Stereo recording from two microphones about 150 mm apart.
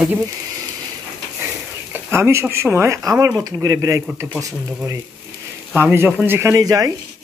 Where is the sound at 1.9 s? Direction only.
15° right (ahead or behind).